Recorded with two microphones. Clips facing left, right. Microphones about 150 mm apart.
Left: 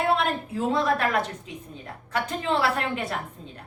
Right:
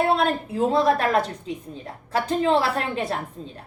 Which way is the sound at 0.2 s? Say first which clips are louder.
Right 4 dB; 35° right (ahead or behind).